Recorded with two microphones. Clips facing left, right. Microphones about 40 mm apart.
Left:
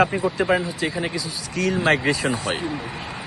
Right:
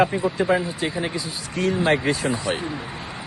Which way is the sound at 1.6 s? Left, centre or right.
Left.